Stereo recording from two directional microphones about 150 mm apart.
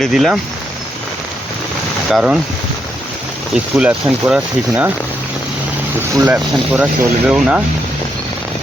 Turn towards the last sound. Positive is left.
turn(degrees=-5)  # may be behind; listen again after turning